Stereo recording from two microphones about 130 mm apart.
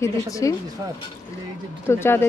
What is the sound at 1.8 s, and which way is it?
Speech, 20° left (ahead or behind).